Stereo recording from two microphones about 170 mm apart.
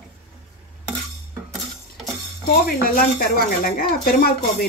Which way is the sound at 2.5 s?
60° left (ahead or behind).